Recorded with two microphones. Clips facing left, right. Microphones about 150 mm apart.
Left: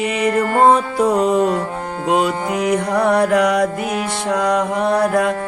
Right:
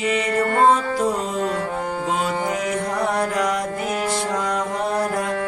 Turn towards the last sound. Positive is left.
turn(degrees=70)  # may be behind; listen again after turning